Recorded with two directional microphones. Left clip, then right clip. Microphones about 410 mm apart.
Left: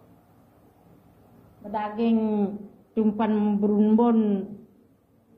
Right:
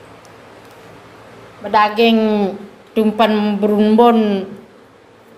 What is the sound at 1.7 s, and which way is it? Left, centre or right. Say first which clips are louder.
A woman's voice: right 15 dB; right.